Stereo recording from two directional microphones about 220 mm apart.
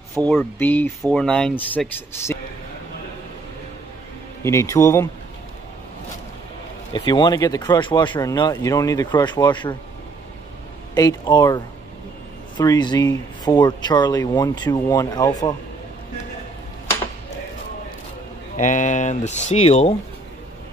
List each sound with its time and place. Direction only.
0.2 s speech: 5° left (ahead or behind)
4.4 s speech: 10° left (ahead or behind)
6.9 s speech: 20° left (ahead or behind)
11.0 s speech: 15° left (ahead or behind)
18.6 s speech: 35° left (ahead or behind)